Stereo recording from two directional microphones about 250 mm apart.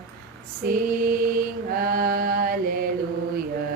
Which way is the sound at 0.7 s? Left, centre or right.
Right.